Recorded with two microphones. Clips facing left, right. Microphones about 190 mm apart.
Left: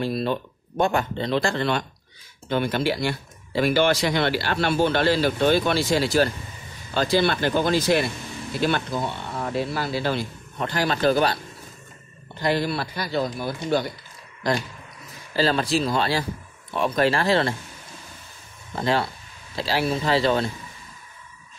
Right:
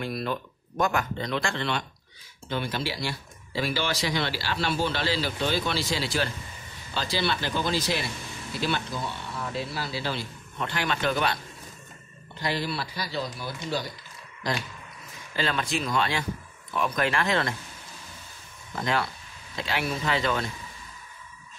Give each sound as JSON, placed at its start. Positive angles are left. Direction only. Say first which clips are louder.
{"t": 0.0, "sound": "speech", "louder": "left 6 dB", "side_deg": 30}
{"t": 2.5, "sound": "speech", "louder": "left 7 dB", "side_deg": 55}
{"t": 12.4, "sound": "speech", "louder": "left 6 dB", "side_deg": 50}
{"t": 15.3, "sound": "speech", "louder": "left 7 dB", "side_deg": 35}
{"t": 18.8, "sound": "speech", "louder": "left 4 dB", "side_deg": 30}